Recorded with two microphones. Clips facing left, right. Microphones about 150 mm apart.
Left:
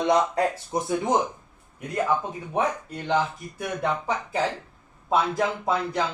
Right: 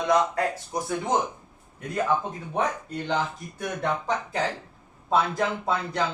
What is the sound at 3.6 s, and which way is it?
Speech, 5° left (ahead or behind).